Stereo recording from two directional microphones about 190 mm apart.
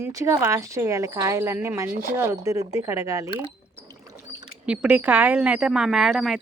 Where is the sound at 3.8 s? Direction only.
15° right (ahead or behind).